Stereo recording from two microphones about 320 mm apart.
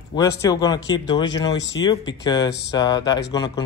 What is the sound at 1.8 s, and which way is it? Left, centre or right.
Speech, centre.